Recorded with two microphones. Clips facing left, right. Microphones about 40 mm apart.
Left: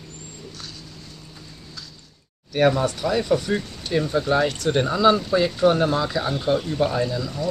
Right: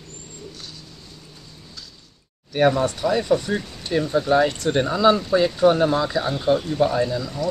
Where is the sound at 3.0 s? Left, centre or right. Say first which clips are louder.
Right 1 dB; centre.